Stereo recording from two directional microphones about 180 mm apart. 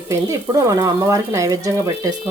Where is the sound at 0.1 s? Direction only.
15° right (ahead or behind).